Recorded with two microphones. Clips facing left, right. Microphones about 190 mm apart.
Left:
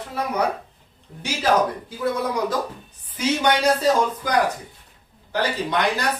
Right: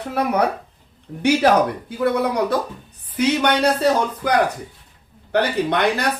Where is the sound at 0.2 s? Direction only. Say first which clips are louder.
Right 6 dB; 65° right (ahead or behind).